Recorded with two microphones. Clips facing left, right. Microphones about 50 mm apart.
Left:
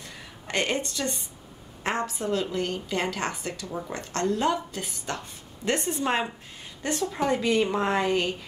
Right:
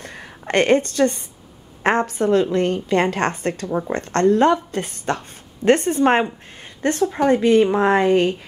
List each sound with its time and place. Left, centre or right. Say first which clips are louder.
0.0 s a sound: right 7 dB; right
1.8 s a woman's voice: right 10 dB; right
3.6 s a woman's voice: right 10 dB; right